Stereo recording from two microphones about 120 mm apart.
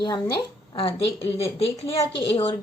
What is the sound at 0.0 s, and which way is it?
Speech, 35° left (ahead or behind).